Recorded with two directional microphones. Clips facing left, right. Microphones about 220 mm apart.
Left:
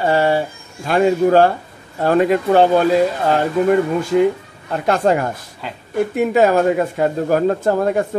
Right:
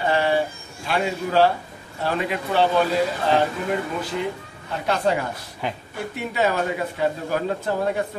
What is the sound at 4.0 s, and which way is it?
A man's voice, 45° left (ahead or behind).